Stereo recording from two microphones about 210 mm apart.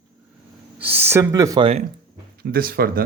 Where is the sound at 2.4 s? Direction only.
45° right (ahead or behind).